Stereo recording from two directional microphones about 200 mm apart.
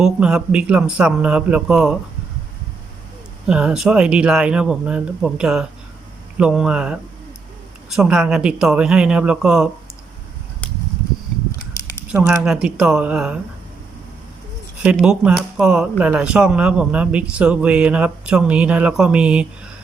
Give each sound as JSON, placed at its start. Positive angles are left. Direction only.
{"t": 0.0, "sound": "speech", "side_deg": -5}
{"t": 3.4, "sound": "speech", "side_deg": -5}
{"t": 11.8, "sound": "a sound", "side_deg": 15}
{"t": 12.1, "sound": "speech", "side_deg": -10}
{"t": 14.9, "sound": "speech", "side_deg": -5}